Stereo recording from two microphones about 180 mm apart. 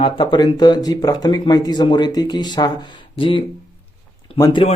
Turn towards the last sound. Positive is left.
turn(degrees=30)  # may be behind; listen again after turning